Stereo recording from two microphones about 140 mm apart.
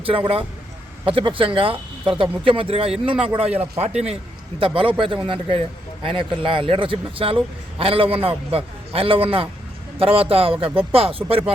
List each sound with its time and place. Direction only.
0.0 s a man's voice: 40° right (ahead or behind)
4.6 s a man's voice: 40° right (ahead or behind)